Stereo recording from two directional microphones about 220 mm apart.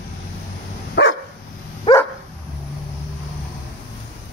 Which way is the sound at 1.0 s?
50° left (ahead or behind).